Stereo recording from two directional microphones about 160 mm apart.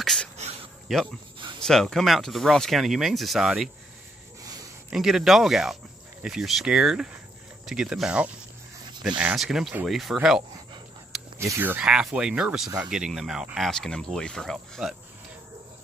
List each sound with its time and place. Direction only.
0.0 s cricket: centre (ahead or behind)
0.9 s speech: centre (ahead or behind)
4.9 s speech: centre (ahead or behind)
11.3 s speech: 15° right (ahead or behind); by 15.0 s centre (ahead or behind)